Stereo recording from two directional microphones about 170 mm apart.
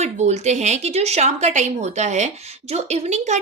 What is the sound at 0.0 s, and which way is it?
Speech, 40° right (ahead or behind).